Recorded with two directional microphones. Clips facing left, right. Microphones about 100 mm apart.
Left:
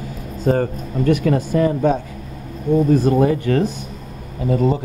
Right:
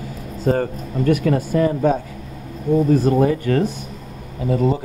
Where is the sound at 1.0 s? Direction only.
30° left (ahead or behind).